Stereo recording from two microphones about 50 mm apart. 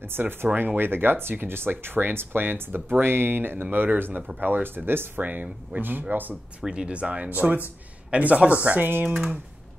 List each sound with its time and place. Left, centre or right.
0.0 s speech: right
5.2 s speech: right
6.6 s speech: centre
6.9 s a man's voice: right